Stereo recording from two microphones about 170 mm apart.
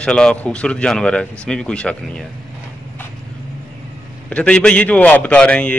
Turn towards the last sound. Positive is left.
turn(degrees=5)  # may be behind; listen again after turning